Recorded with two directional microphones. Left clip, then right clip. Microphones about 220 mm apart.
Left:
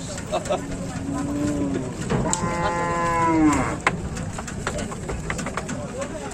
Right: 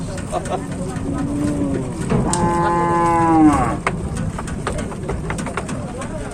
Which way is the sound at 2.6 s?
25° left (ahead or behind).